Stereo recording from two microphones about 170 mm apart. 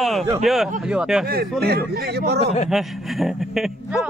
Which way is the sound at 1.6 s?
70° right (ahead or behind).